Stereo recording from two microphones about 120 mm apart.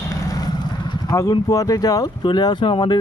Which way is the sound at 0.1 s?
30° left (ahead or behind).